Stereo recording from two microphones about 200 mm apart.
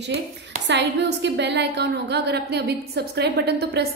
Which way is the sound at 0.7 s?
60° right (ahead or behind).